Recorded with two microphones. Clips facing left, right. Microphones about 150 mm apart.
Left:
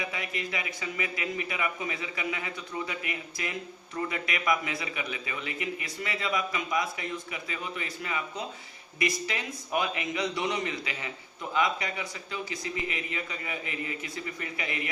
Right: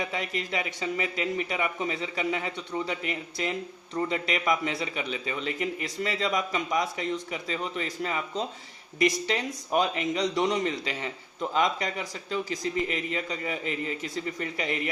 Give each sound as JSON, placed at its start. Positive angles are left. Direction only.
{"t": 0.0, "sound": "a man's voice", "side_deg": -35}